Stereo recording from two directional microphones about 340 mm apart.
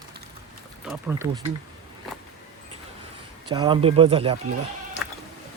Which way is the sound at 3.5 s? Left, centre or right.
Centre.